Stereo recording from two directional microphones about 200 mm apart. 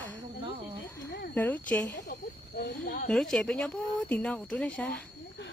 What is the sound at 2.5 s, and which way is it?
Speech, 50° left (ahead or behind).